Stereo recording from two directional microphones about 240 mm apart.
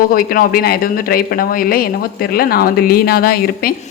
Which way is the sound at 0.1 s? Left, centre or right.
Left.